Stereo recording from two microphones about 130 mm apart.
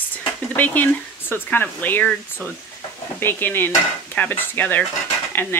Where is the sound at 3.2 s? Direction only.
15° left (ahead or behind).